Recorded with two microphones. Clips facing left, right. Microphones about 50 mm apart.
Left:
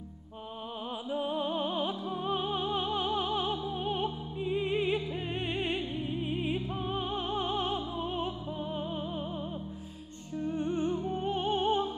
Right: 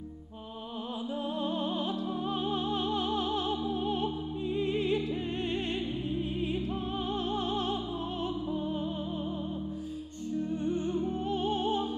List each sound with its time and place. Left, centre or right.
1.1 s music: centre
10.5 s music: left